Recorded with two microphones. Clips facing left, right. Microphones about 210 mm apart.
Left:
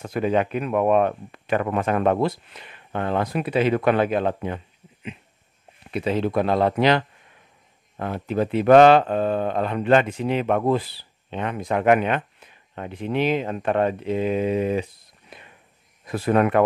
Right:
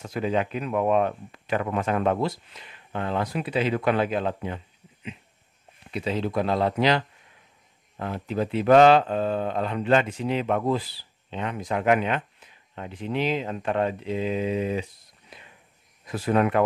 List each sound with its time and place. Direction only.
0.0 s speech: 55° left (ahead or behind)
5.9 s speech: 55° left (ahead or behind)